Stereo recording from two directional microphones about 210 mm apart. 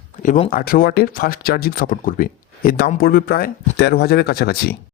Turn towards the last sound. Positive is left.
turn(degrees=45)  # may be behind; listen again after turning